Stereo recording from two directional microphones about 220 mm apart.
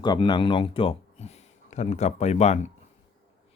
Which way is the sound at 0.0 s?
20° left (ahead or behind).